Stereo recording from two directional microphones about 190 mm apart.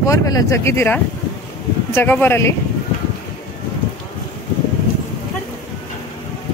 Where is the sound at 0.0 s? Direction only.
15° left (ahead or behind).